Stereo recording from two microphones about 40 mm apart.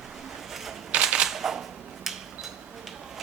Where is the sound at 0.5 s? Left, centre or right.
Centre.